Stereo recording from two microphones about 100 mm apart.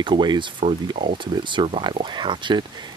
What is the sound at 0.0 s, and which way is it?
Speech, 50° right (ahead or behind).